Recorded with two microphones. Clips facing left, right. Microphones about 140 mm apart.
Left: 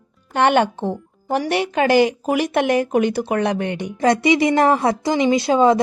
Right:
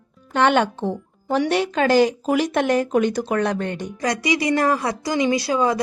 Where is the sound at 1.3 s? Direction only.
60° left (ahead or behind).